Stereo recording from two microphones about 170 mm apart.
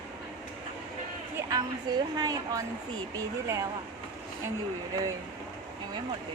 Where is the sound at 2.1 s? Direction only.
25° right (ahead or behind).